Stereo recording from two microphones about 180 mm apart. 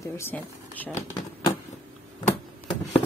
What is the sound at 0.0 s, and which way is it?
Speech, 10° left (ahead or behind).